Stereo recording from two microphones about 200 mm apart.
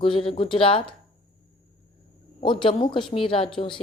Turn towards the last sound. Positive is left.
turn(degrees=25)  # may be behind; listen again after turning